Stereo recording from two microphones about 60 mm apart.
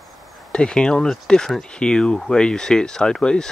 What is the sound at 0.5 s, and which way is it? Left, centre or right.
Speech, centre.